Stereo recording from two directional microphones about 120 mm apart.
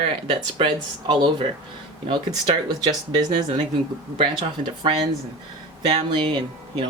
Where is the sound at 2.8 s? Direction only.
35° right (ahead or behind).